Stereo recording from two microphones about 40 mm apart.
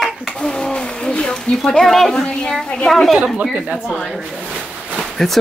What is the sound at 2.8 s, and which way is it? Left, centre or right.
Speech, centre.